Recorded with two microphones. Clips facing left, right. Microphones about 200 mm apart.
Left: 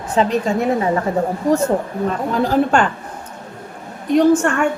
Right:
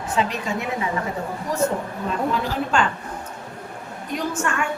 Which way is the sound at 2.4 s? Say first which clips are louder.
Left 7 dB; 50° left (ahead or behind).